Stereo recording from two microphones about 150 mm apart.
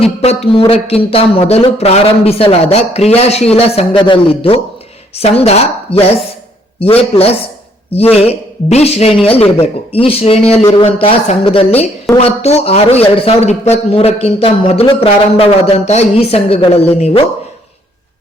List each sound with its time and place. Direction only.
0.0 s a man's voice: 40° left (ahead or behind)